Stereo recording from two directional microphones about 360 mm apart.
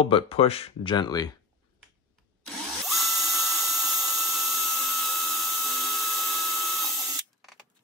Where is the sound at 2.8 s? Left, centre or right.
Centre.